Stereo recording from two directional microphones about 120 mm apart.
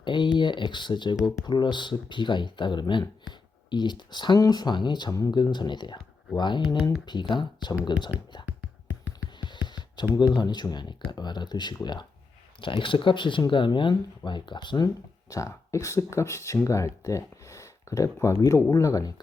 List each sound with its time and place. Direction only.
0.0 s speech: 40° left (ahead or behind)
9.4 s music: 40° left (ahead or behind)
10.2 s speech: 35° left (ahead or behind)
15.3 s speech: 25° left (ahead or behind)